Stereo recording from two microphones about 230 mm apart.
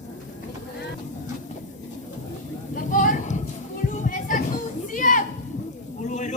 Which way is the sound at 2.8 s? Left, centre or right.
Left.